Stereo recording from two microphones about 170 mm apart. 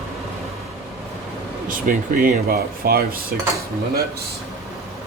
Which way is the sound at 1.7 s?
55° right (ahead or behind).